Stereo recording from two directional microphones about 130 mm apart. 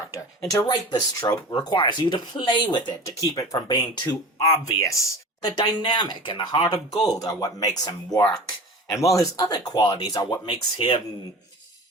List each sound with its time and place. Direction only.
0.1 s speech: 25° left (ahead or behind)